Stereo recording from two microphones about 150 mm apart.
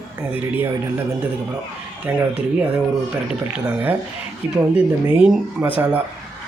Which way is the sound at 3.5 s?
10° right (ahead or behind).